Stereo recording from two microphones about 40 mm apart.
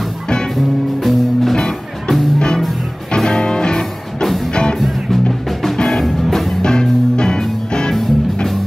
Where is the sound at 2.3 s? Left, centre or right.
Left.